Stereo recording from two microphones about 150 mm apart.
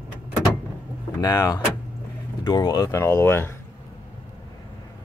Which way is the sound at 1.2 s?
25° left (ahead or behind).